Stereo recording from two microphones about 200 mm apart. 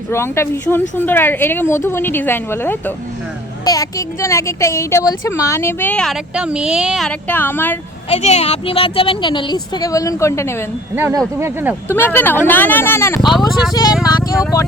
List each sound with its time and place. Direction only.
0.1 s speech: 15° left (ahead or behind)
8.1 s speech: 35° left (ahead or behind); by 10.6 s 15° left (ahead or behind)
10.9 s speech: 10° right (ahead or behind)
11.9 s speech: 10° left (ahead or behind)